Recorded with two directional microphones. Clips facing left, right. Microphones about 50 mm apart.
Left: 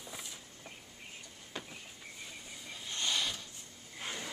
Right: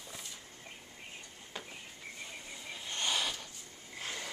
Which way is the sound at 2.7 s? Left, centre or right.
Centre.